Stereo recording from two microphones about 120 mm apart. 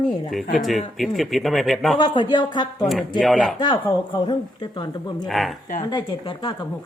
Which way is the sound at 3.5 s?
40° left (ahead or behind).